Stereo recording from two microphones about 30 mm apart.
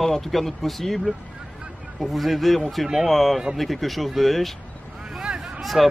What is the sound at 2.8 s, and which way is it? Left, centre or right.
Speech, centre.